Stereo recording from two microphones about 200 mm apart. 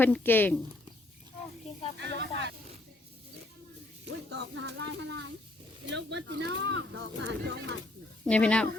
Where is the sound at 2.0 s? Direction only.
60° right (ahead or behind).